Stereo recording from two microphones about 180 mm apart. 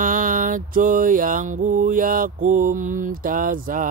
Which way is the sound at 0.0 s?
50° right (ahead or behind).